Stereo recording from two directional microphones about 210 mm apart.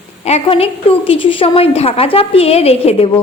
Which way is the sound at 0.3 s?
30° left (ahead or behind).